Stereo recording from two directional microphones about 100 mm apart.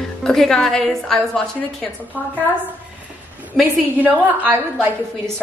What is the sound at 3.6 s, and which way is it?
Speech, 5° left (ahead or behind).